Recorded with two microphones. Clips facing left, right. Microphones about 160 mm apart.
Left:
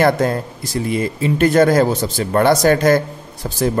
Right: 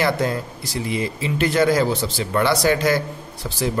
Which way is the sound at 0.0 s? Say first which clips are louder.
Left 5 dB; 50° left (ahead or behind).